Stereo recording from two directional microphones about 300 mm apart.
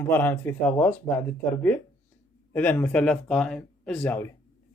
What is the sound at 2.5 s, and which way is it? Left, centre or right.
Speech, centre.